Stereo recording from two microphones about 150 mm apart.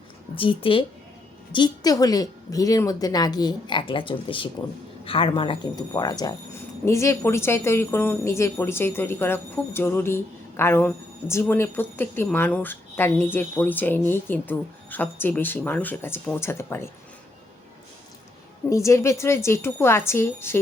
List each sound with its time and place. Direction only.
0.3 s a woman's voice: 35° left (ahead or behind); by 16.9 s 15° left (ahead or behind)
18.7 s speech: 20° left (ahead or behind)